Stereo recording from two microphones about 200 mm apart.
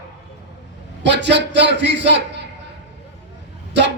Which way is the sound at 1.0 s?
60° right (ahead or behind).